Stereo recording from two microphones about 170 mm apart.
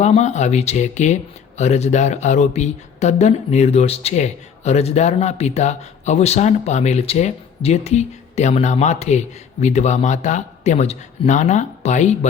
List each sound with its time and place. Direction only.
0.0 s speech: 40° left (ahead or behind)